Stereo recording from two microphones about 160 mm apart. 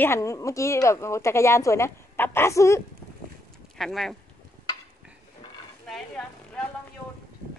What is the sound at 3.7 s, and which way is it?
Speech, centre (ahead or behind).